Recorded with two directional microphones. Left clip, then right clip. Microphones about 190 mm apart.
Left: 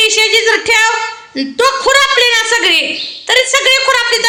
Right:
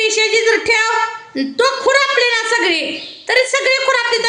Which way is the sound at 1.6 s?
Centre (ahead or behind).